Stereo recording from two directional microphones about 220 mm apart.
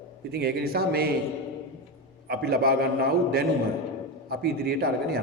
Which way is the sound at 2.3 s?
45° right (ahead or behind).